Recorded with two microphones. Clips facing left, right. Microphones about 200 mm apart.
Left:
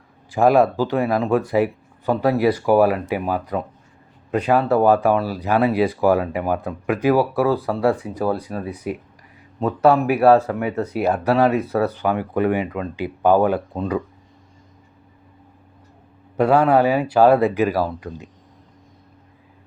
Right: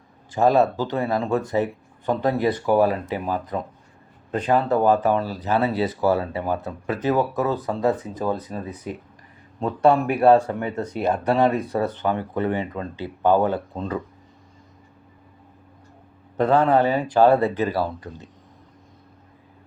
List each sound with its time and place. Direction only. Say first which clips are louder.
0.3 s speech: left 3 dB; 10° left (ahead or behind)
16.4 s speech: left 2 dB; 10° left (ahead or behind)